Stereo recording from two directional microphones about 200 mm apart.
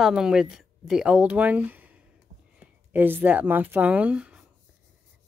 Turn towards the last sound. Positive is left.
turn(degrees=-5)  # may be behind; listen again after turning